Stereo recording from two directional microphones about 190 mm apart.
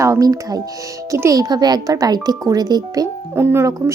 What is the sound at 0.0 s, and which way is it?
Speech, 20° right (ahead or behind).